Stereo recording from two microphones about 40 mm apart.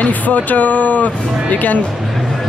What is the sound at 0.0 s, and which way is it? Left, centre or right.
Speech, left.